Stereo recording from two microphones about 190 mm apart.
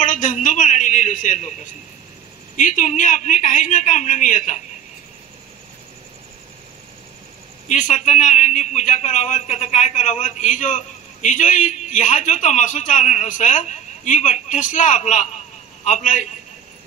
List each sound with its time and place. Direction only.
0.0 s a sound: 45° left (ahead or behind)
2.5 s a woman's voice: 40° left (ahead or behind)
7.6 s a man's voice: 40° left (ahead or behind)